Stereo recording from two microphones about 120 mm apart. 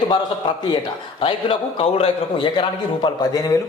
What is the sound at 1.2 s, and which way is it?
A man's voice, 50° left (ahead or behind).